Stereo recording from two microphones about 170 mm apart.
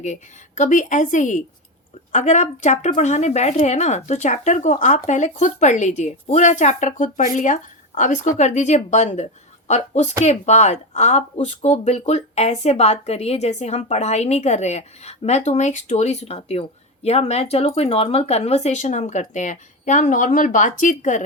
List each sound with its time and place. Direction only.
0.0 s speech: 45° left (ahead or behind)